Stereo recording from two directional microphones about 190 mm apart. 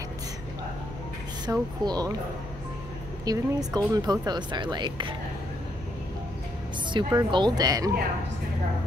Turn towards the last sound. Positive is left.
turn(degrees=-20)  # may be behind; listen again after turning